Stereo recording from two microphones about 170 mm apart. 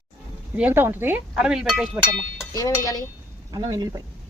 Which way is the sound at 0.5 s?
10° right (ahead or behind).